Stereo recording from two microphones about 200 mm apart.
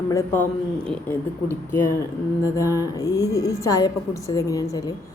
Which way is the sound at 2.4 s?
15° left (ahead or behind).